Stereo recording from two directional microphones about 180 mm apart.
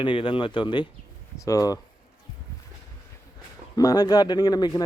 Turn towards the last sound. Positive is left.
turn(degrees=20)  # may be behind; listen again after turning